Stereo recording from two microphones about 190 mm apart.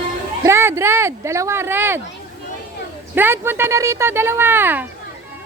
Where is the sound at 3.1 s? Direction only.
10° right (ahead or behind).